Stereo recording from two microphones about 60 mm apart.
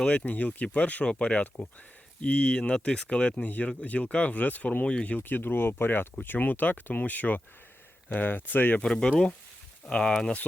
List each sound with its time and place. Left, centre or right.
0.0 s speech: centre
0.3 s speech: left
5.4 s speech: left
8.8 s speech: centre